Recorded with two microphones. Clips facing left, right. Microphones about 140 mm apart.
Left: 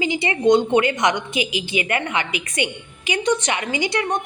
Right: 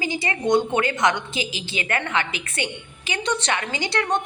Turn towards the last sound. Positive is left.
turn(degrees=10)  # may be behind; listen again after turning